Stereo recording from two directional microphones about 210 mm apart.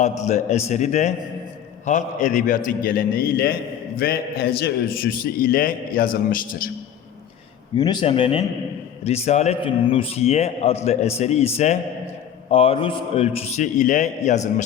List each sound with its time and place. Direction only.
0.0 s a man's voice: 35° left (ahead or behind)
7.8 s a man's voice: 20° left (ahead or behind)